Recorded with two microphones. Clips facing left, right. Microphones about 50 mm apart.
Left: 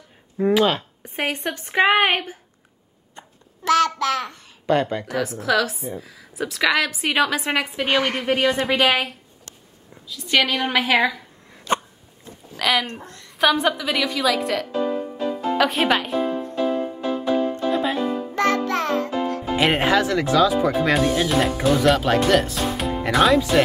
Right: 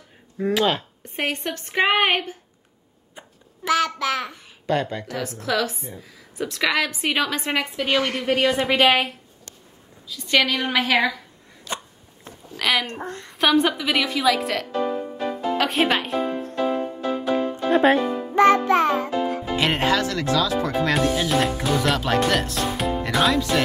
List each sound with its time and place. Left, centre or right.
0.4 s a woman's voice: centre
3.2 s babbling: centre
4.6 s a woman's voice: centre
7.7 s a woman's voice: left
8.3 s speech: centre
11.7 s a sound: left
12.5 s speech: centre
12.9 s a woman's voice: right
13.3 s speech: centre
17.6 s speech: right
18.3 s music: centre
19.5 s a woman's voice: centre